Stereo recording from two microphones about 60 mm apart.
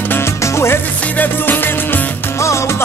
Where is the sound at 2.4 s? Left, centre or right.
Left.